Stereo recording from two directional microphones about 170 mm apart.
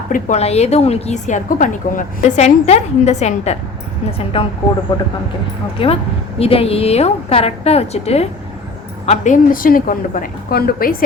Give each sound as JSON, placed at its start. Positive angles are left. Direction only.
{"t": 0.1, "sound": "a woman's voice", "side_deg": 40}
{"t": 6.4, "sound": "a woman's voice", "side_deg": 35}
{"t": 9.0, "sound": "a woman's voice", "side_deg": 50}